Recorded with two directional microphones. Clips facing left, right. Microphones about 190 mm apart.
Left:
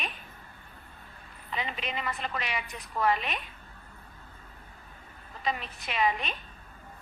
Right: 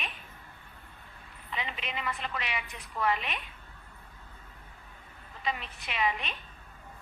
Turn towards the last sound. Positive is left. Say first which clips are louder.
# left 3 dB
turn(degrees=40)  # may be behind; listen again after turning